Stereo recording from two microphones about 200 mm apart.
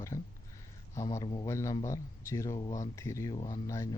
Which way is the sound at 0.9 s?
15° left (ahead or behind).